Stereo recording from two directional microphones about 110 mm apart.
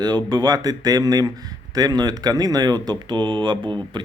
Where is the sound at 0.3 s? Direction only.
35° right (ahead or behind).